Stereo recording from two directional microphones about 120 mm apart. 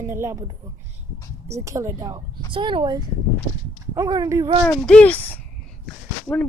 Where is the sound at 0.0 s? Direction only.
20° right (ahead or behind).